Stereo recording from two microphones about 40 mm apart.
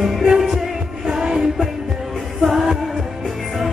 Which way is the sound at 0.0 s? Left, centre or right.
Centre.